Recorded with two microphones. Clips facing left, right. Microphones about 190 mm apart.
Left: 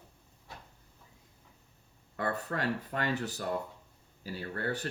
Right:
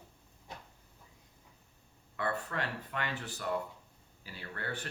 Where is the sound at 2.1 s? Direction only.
40° left (ahead or behind).